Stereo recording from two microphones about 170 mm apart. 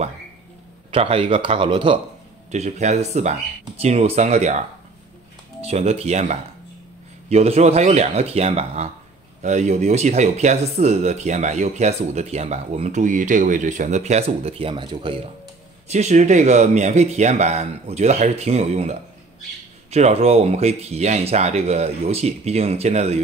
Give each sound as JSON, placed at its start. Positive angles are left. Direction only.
{"t": 0.9, "sound": "speech", "side_deg": -35}
{"t": 2.5, "sound": "speech", "side_deg": -45}
{"t": 15.9, "sound": "speech", "side_deg": -40}